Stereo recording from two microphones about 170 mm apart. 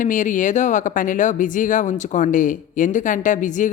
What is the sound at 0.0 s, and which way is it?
A woman's voice, 50° left (ahead or behind).